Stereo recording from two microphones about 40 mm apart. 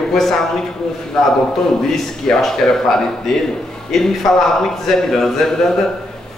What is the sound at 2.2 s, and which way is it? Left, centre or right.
A man's voice, centre.